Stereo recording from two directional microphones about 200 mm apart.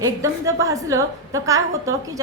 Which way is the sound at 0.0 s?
15° right (ahead or behind).